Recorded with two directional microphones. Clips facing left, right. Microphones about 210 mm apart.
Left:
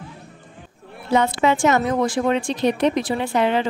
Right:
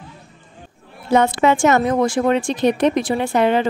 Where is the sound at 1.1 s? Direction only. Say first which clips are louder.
Right 3 dB; 50° right (ahead or behind).